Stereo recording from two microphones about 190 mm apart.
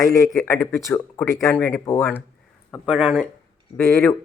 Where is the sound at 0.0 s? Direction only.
15° left (ahead or behind).